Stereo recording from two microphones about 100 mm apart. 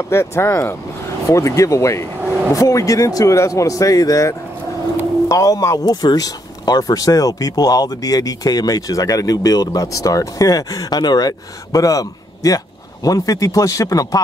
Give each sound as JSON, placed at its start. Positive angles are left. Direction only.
{"t": 0.1, "sound": "speech", "side_deg": 25}